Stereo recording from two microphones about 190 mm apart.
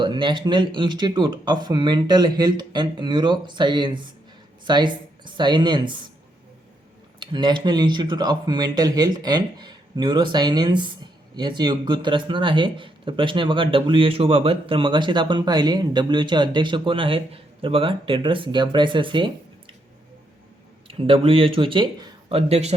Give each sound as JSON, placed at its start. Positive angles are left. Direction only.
{"t": 0.0, "sound": "speech", "side_deg": -25}
{"t": 7.2, "sound": "speech", "side_deg": -25}
{"t": 20.8, "sound": "speech", "side_deg": -30}